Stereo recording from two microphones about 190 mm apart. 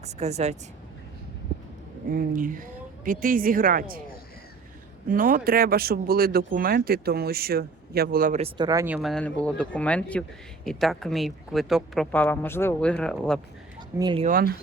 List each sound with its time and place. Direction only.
0.0 s speech: 35° right (ahead or behind)
2.1 s speech: 45° right (ahead or behind)
5.0 s speech: 45° right (ahead or behind)
8.4 s speech: 25° right (ahead or behind)
9.0 s speech: centre (ahead or behind)
14.0 s speech: 25° right (ahead or behind)
14.3 s speech: 50° right (ahead or behind)